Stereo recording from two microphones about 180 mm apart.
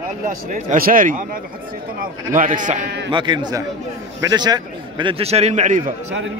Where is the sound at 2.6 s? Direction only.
45° right (ahead or behind).